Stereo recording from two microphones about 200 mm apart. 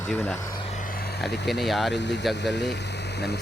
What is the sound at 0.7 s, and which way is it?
Vehicle, 40° left (ahead or behind).